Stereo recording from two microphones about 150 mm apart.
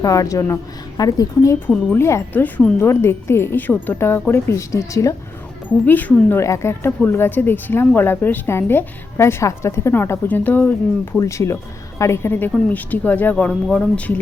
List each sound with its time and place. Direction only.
0.0 s a woman's voice: 20° left (ahead or behind)